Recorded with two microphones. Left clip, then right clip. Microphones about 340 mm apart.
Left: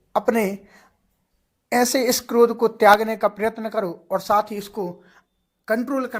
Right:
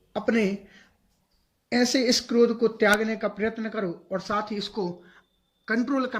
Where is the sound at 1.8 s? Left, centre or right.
Centre.